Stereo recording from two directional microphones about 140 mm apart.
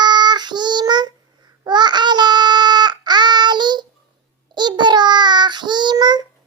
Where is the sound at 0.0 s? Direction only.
30° right (ahead or behind).